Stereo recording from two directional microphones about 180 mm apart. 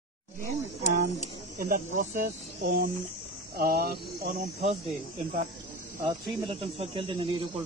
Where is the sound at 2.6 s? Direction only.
55° right (ahead or behind).